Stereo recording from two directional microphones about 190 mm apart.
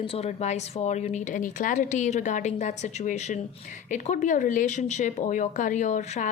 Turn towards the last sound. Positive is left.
turn(degrees=40)  # may be behind; listen again after turning